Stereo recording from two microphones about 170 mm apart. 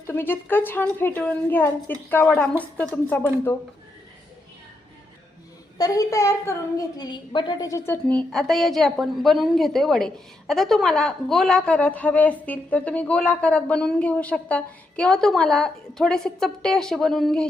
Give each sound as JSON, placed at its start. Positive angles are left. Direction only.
{"t": 0.1, "sound": "a woman's voice", "side_deg": 10}
{"t": 5.7, "sound": "a woman's voice", "side_deg": 20}
{"t": 8.0, "sound": "a woman's voice", "side_deg": 5}